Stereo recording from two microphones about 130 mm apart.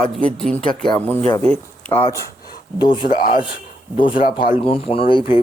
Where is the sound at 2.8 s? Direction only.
35° left (ahead or behind).